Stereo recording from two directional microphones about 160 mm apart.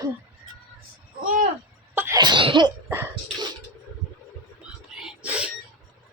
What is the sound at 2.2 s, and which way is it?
Cough, 30° right (ahead or behind).